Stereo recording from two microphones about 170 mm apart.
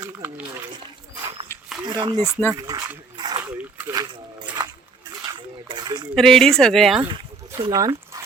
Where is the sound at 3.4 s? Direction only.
10° right (ahead or behind).